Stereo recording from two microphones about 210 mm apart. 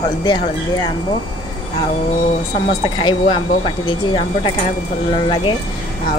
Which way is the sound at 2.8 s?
25° left (ahead or behind).